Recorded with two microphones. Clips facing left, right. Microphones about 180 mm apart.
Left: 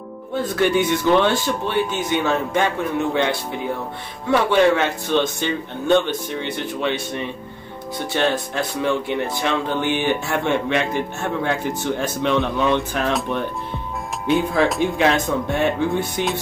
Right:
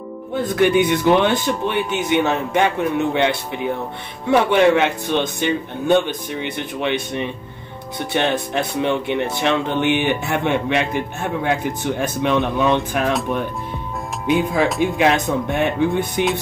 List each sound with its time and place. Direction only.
0.6 s speech: 15° right (ahead or behind)
14.2 s speech: 15° right (ahead or behind)